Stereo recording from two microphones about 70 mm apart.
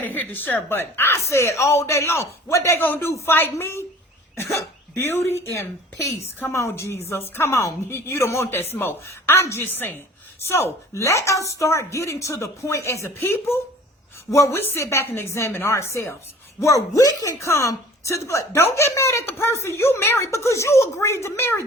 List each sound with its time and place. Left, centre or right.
0.0 s a woman's voice: left
2.7 s speech: left
3.1 s speech: left
3.3 s a woman's voice: left
4.9 s a woman's voice: left
14.3 s a woman's voice: left
16.6 s speech: left